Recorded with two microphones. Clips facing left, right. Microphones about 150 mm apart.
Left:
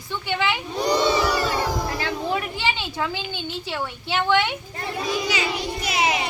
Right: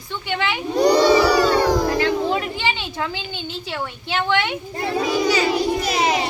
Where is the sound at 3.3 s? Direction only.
15° left (ahead or behind).